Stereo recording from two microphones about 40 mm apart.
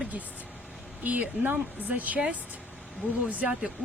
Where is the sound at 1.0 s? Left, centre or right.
Right.